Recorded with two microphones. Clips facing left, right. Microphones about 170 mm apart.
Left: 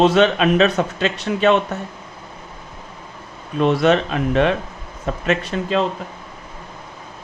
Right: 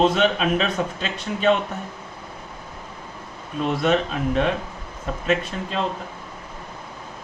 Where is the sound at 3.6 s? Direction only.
75° left (ahead or behind).